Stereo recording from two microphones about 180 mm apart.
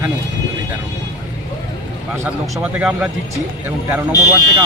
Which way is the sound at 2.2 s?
5° right (ahead or behind).